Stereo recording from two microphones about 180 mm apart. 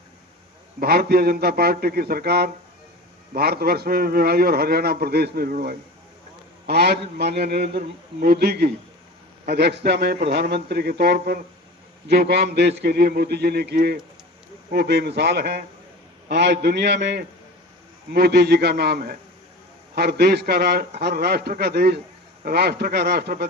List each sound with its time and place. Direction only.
0.8 s a man's voice: 60° right (ahead or behind)